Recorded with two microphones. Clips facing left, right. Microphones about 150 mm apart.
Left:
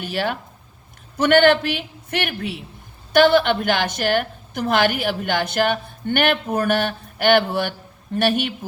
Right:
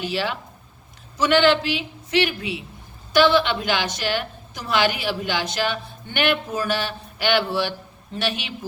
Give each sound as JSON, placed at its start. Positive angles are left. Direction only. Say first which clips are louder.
{"t": 0.0, "sound": "a woman's voice", "louder": "left 1 dB", "side_deg": 55}